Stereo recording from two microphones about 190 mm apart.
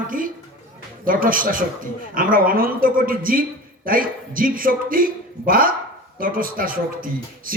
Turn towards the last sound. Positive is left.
turn(degrees=-50)  # may be behind; listen again after turning